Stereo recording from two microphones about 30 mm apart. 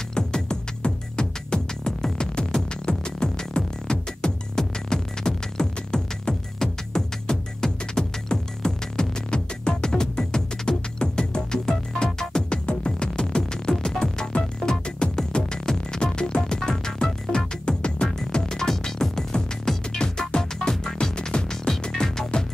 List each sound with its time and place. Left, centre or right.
0.1 s music: left
13.8 s music: centre
15.0 s music: left
20.0 s music: left
22.0 s music: centre